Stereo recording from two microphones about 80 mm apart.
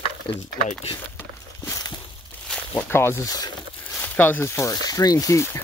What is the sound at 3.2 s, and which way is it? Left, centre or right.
Speech, left.